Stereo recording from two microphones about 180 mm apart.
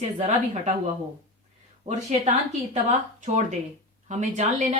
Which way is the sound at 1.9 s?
40° right (ahead or behind).